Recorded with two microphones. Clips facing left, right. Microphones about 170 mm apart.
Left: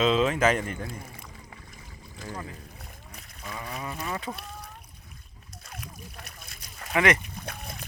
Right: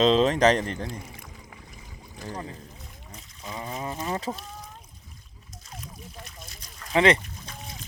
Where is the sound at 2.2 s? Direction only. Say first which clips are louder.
Right 2 dB; 15° right (ahead or behind).